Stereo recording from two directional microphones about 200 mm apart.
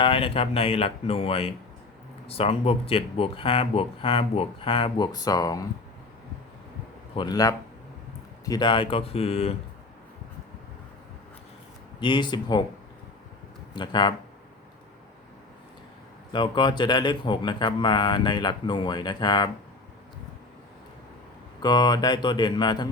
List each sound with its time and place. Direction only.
0.0 s speech: 25° left (ahead or behind)
7.2 s speech: 20° left (ahead or behind)
11.9 s speech: 25° left (ahead or behind)
13.7 s speech: 20° left (ahead or behind)
16.3 s speech: 20° left (ahead or behind)
21.6 s speech: 20° left (ahead or behind)